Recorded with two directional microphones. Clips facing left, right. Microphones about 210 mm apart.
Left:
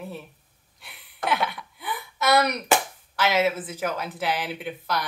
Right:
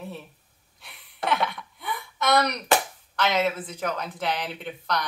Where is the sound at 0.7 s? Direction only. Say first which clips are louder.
Right 1 dB; centre (ahead or behind).